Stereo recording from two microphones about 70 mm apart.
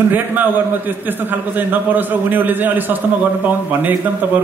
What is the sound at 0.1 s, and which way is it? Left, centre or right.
A man's voice, right.